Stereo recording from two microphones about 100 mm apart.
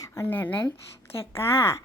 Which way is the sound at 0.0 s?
25° left (ahead or behind).